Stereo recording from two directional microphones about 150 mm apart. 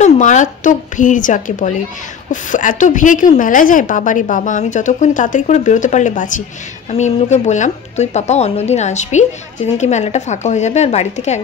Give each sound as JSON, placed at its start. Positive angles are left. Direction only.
{"t": 0.0, "sound": "a woman's voice", "side_deg": 55}